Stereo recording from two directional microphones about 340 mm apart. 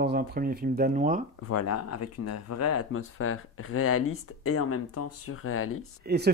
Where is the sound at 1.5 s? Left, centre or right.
Left.